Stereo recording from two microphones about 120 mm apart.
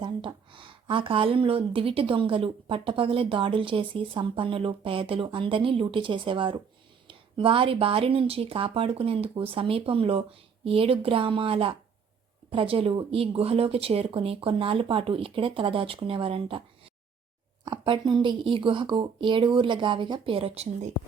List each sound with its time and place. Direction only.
0.0 s speech: 40° right (ahead or behind); by 20.9 s 60° right (ahead or behind)